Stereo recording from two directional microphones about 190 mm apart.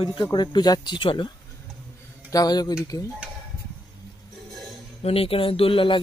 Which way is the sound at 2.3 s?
20° left (ahead or behind).